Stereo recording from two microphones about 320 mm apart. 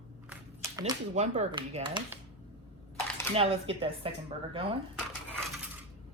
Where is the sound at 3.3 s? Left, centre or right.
Centre.